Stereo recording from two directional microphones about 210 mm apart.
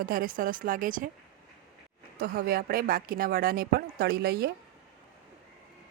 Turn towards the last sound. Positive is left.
turn(degrees=-50)  # may be behind; listen again after turning